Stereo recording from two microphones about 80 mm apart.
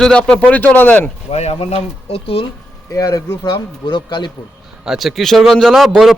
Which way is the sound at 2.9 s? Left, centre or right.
Left.